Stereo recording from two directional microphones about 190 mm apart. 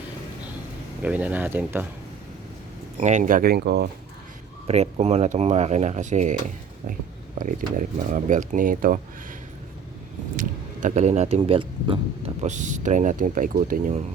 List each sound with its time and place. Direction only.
1.0 s speech: 10° right (ahead or behind)
3.0 s speech: 40° right (ahead or behind); by 3.8 s 60° right (ahead or behind)
4.6 s speech: 35° right (ahead or behind)
7.3 s speech: 40° right (ahead or behind)
10.8 s speech: 35° right (ahead or behind)